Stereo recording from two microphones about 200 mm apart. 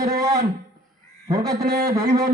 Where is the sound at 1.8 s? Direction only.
15° right (ahead or behind).